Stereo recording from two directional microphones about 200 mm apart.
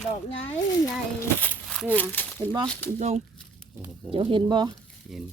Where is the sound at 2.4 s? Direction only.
25° right (ahead or behind).